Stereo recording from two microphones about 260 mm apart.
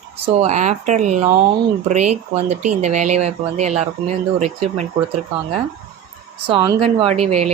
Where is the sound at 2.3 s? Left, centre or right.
Right.